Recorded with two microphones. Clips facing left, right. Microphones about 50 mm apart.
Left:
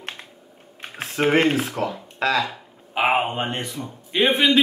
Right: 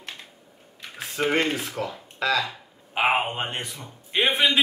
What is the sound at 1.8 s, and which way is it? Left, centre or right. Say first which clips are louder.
Speech: left 4 dB; left.